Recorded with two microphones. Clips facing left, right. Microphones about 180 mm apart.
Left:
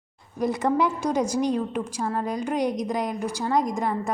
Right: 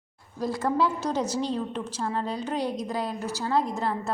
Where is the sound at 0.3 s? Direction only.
20° left (ahead or behind).